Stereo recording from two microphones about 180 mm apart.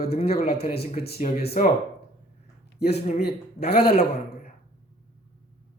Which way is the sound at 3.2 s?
65° left (ahead or behind).